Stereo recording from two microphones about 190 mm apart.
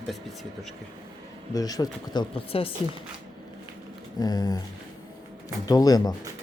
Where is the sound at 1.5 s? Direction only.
20° left (ahead or behind).